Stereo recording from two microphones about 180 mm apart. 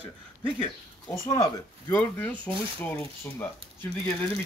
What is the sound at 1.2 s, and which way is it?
Speech, 20° left (ahead or behind).